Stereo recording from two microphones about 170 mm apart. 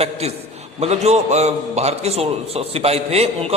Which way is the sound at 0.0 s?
40° right (ahead or behind).